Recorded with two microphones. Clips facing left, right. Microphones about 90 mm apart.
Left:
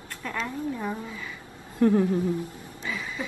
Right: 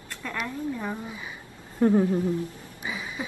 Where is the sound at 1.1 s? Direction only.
20° right (ahead or behind).